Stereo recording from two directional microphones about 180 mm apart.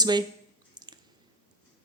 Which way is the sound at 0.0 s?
25° right (ahead or behind).